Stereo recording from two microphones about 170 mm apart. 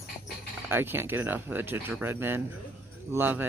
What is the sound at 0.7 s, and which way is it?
Speech, 10° right (ahead or behind).